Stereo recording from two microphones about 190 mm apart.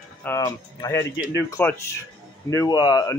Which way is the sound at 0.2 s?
15° left (ahead or behind).